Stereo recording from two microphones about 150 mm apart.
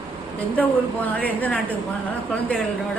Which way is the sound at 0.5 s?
10° left (ahead or behind).